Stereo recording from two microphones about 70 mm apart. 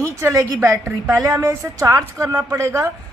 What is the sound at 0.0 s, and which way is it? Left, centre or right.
A woman's voice, right.